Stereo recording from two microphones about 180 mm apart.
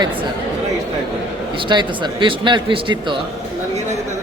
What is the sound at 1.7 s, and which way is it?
Speech, 25° right (ahead or behind).